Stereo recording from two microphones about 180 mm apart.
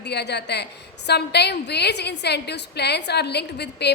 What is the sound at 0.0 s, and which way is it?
A woman's voice, 70° left (ahead or behind).